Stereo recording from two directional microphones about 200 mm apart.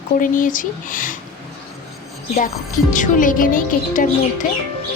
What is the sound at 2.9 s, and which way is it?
Speech, 40° left (ahead or behind).